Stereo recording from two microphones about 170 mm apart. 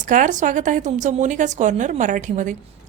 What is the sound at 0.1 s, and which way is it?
A woman's voice, 50° right (ahead or behind).